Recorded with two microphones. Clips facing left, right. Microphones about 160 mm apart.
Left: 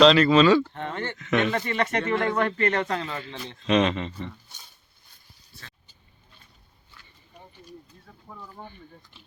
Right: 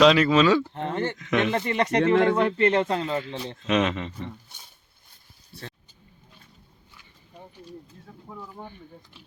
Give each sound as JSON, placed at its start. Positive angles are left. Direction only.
{"t": 0.0, "sound": "speech", "side_deg": -10}
{"t": 0.7, "sound": "speech", "side_deg": -25}
{"t": 1.1, "sound": "speech", "side_deg": -15}
{"t": 1.5, "sound": "speech", "side_deg": -25}
{"t": 3.7, "sound": "speech", "side_deg": -10}
{"t": 8.3, "sound": "a sound", "side_deg": -10}